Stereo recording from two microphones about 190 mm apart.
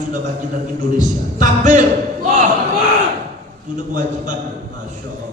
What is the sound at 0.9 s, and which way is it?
Music, 40° right (ahead or behind).